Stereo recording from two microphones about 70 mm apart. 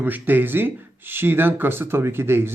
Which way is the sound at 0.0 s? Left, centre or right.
Right.